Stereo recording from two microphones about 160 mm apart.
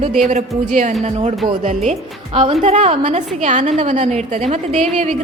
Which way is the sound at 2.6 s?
45° right (ahead or behind).